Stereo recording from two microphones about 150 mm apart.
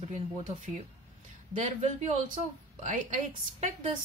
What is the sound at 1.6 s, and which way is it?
Speech, 55° right (ahead or behind).